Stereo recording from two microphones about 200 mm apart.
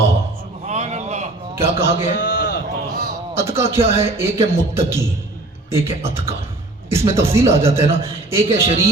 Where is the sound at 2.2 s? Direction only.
60° left (ahead or behind).